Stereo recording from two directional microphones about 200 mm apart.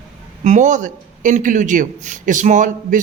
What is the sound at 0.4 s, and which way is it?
A man's voice, 40° right (ahead or behind).